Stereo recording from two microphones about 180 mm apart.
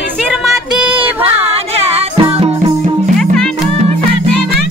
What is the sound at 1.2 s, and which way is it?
Speech, 35° right (ahead or behind).